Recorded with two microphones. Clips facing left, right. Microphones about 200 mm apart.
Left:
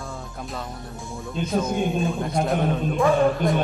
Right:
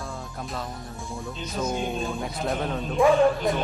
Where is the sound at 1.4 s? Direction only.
55° left (ahead or behind).